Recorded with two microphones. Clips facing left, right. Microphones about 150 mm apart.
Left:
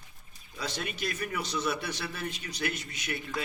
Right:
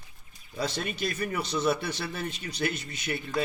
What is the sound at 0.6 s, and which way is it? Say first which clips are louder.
A man's voice: right 4 dB; 35° right (ahead or behind).